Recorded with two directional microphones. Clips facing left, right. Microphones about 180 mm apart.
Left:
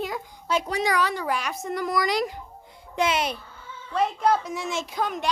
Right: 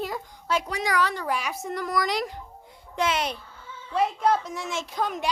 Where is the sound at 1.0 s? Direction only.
10° left (ahead or behind).